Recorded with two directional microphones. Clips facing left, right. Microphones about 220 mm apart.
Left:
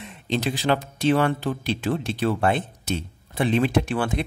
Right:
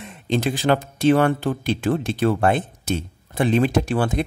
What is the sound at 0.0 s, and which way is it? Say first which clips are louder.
Speech: right 3 dB; 50° right (ahead or behind).